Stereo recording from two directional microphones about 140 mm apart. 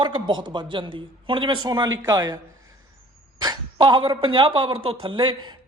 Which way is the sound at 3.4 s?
30° right (ahead or behind).